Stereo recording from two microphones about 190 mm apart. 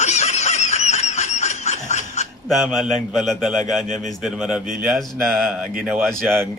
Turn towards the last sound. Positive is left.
turn(degrees=0)  # may be behind; listen again after turning